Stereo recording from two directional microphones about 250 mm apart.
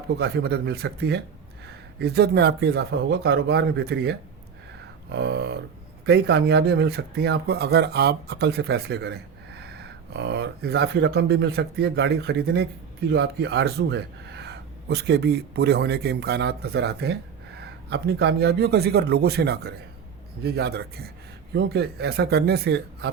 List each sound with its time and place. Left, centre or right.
0.2 s speech: right